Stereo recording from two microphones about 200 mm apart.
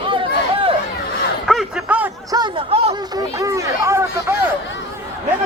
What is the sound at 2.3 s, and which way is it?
Speech, 25° right (ahead or behind).